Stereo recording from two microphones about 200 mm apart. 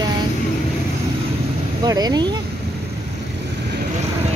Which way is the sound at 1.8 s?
20° right (ahead or behind).